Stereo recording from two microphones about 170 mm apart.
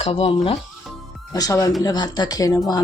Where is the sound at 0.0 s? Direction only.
35° left (ahead or behind).